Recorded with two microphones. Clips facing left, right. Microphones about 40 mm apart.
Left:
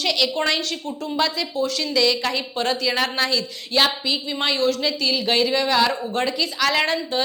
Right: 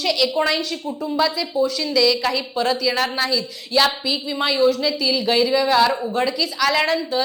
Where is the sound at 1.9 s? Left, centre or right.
Centre.